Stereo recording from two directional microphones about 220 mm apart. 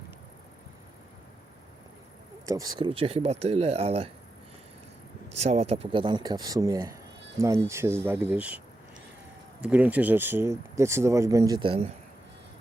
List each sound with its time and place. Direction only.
2.5 s speech: 15° right (ahead or behind)
5.4 s speech: 30° right (ahead or behind)